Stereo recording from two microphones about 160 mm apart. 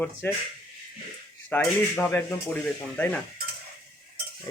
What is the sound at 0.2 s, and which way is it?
Speech, 15° left (ahead or behind).